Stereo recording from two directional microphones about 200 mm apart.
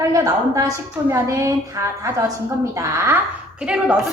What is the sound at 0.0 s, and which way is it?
A woman's voice, 15° right (ahead or behind).